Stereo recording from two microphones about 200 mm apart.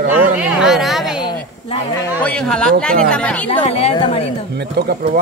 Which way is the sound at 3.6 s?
30° left (ahead or behind).